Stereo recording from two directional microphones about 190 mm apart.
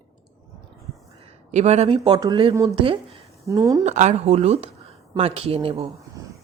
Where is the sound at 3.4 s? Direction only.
15° right (ahead or behind).